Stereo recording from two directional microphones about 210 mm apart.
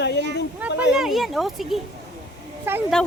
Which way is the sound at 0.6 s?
10° right (ahead or behind).